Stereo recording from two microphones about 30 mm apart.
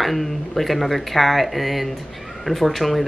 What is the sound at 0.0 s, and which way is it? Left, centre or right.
Speech, centre.